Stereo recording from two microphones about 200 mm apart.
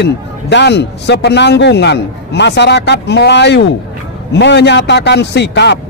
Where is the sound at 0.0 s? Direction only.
60° left (ahead or behind).